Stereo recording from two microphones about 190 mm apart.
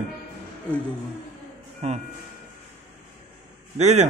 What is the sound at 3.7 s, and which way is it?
Speech, 35° right (ahead or behind).